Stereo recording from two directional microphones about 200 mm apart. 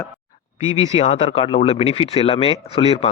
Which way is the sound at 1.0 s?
30° left (ahead or behind).